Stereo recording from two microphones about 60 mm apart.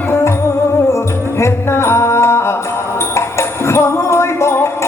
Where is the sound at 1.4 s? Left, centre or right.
Left.